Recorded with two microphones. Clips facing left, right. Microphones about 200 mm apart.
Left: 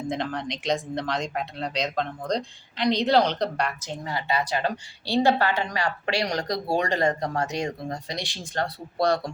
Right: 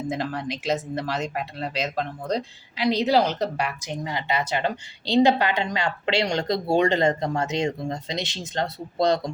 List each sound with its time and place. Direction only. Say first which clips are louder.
0.1 s speech: right 1 dB; 5° right (ahead or behind); by 9.3 s 20° right (ahead or behind)